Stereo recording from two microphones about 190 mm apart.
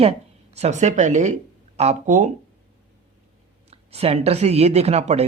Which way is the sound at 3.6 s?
35° right (ahead or behind).